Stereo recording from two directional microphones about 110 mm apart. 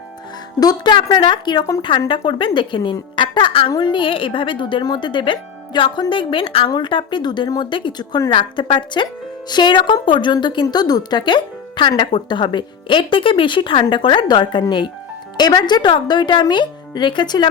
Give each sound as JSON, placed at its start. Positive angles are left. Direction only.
{"t": 0.6, "sound": "a woman's voice", "side_deg": 40}
{"t": 3.7, "sound": "a woman's voice", "side_deg": 40}
{"t": 6.7, "sound": "a woman's voice", "side_deg": 45}